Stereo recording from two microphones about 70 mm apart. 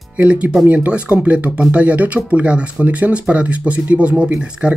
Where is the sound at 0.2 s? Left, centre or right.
Centre.